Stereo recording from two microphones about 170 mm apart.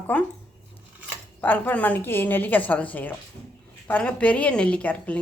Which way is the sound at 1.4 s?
10° left (ahead or behind).